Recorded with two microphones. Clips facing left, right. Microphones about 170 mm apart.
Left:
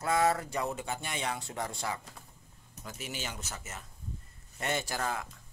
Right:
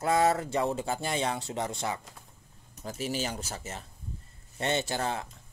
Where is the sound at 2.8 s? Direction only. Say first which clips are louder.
Right 8 dB; 35° right (ahead or behind).